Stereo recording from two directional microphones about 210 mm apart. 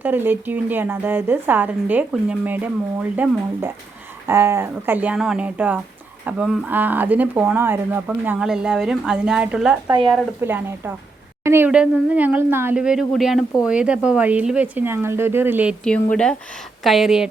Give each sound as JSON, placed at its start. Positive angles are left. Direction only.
{"t": 0.0, "sound": "a woman's voice", "side_deg": -10}
{"t": 9.8, "sound": "speech", "side_deg": -20}
{"t": 10.4, "sound": "a woman's voice", "side_deg": -10}
{"t": 15.8, "sound": "speech", "side_deg": 5}